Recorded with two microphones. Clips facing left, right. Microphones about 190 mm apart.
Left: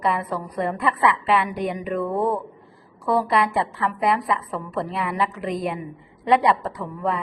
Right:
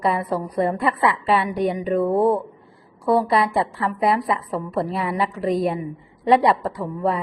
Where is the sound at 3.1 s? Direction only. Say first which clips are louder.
Right 2 dB; 30° right (ahead or behind).